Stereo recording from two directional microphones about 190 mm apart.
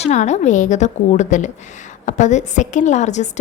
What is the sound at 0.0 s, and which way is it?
A woman's voice, 35° left (ahead or behind).